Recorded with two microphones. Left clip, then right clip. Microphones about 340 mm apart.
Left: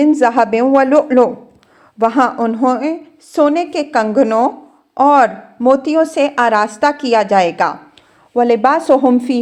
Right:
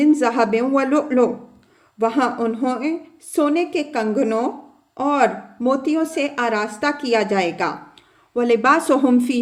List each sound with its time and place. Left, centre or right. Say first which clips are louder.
0.0 s speech: left 5 dB; centre
8.4 s speech: left 4 dB; centre